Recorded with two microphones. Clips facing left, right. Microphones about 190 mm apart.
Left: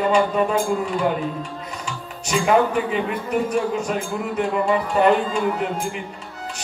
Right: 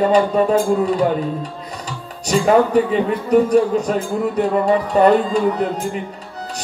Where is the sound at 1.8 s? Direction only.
40° right (ahead or behind).